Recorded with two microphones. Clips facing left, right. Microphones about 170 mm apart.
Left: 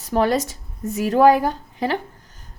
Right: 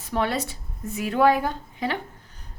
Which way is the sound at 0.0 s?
40° left (ahead or behind).